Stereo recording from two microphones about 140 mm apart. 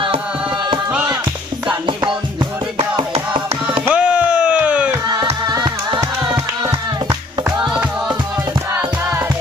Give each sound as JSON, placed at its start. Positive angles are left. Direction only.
{"t": 0.9, "sound": "music", "side_deg": -10}
{"t": 2.7, "sound": "music", "side_deg": -40}
{"t": 3.8, "sound": "a sound", "side_deg": -10}
{"t": 5.5, "sound": "music", "side_deg": -30}
{"t": 8.7, "sound": "music", "side_deg": -15}